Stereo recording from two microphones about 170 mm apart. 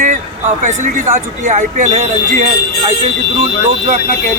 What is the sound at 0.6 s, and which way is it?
Speech, 45° right (ahead or behind).